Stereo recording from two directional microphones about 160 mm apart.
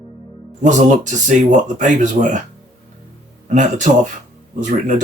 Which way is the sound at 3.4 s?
50° right (ahead or behind).